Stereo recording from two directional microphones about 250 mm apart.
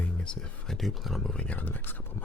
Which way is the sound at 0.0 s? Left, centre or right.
Centre.